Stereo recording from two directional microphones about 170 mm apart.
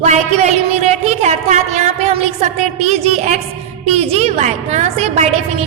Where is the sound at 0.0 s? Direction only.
40° right (ahead or behind).